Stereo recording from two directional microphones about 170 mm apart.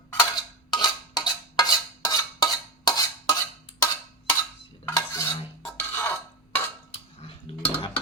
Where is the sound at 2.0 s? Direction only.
25° left (ahead or behind).